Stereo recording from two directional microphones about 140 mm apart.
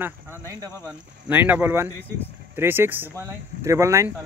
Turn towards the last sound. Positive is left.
turn(degrees=-20)  # may be behind; listen again after turning